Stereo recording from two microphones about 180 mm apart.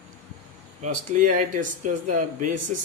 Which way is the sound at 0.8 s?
45° right (ahead or behind).